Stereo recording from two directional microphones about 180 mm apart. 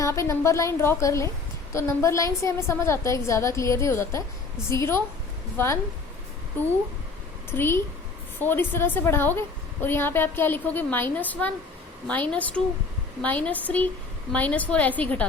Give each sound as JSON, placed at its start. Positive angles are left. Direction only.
{"t": 0.0, "sound": "a woman's voice", "side_deg": 15}
{"t": 7.5, "sound": "a woman's voice", "side_deg": 10}